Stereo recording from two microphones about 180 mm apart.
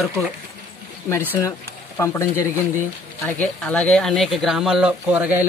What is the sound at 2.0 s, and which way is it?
Speech, 15° left (ahead or behind).